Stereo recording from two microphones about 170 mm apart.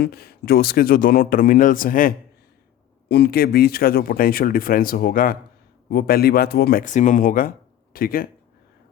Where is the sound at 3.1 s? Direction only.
70° left (ahead or behind).